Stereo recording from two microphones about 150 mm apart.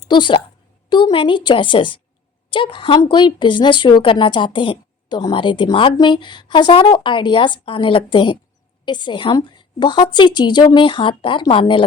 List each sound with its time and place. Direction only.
0.1 s speech: 30° left (ahead or behind)